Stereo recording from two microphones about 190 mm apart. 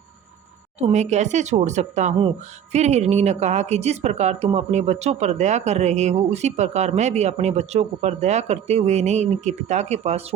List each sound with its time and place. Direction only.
0.8 s a woman's voice: 35° right (ahead or behind)